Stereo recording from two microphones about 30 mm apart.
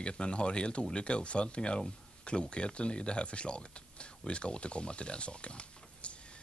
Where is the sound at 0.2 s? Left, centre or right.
Left.